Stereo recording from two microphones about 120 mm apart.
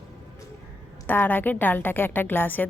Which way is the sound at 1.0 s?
15° left (ahead or behind).